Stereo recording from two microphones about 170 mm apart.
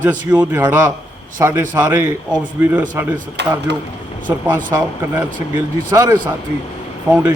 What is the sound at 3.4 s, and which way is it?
Speech, 90° right.